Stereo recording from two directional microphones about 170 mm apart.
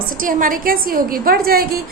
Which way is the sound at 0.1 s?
55° right (ahead or behind).